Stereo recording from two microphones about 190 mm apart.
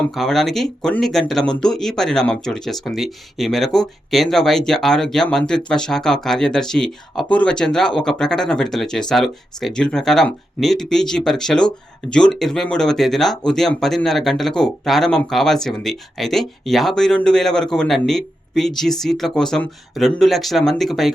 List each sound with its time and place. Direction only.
0.1 s speech: centre (ahead or behind)